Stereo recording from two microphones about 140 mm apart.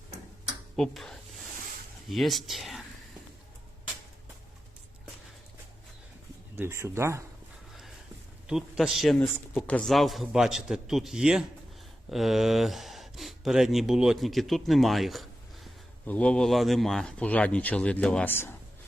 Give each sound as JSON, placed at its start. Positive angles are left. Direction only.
{"t": 0.8, "sound": "a man's voice", "side_deg": 5}
{"t": 6.6, "sound": "speech", "side_deg": -20}
{"t": 8.4, "sound": "a man's voice", "side_deg": -5}
{"t": 9.1, "sound": "a man's voice", "side_deg": 10}